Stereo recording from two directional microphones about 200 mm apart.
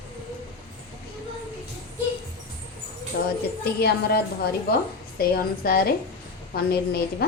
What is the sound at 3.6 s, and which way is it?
A woman's voice, 50° left (ahead or behind).